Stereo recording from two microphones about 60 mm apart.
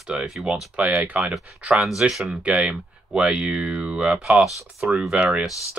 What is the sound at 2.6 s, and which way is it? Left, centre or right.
Speech, centre.